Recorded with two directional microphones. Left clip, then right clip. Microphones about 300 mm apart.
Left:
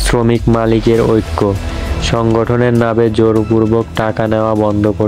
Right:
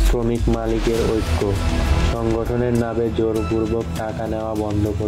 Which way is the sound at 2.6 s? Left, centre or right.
Left.